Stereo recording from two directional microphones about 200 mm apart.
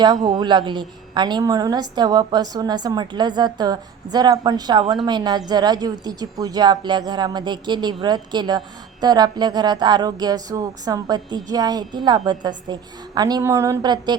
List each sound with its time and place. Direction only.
0.0 s a woman's voice: 20° right (ahead or behind)